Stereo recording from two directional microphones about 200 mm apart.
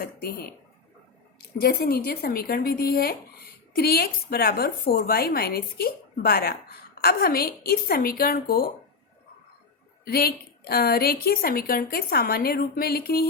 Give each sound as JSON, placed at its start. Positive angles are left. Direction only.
{"t": 0.0, "sound": "speech", "side_deg": 50}
{"t": 10.0, "sound": "speech", "side_deg": 50}